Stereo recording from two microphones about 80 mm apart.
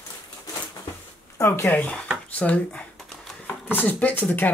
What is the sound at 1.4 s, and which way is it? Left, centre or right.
Speech, left.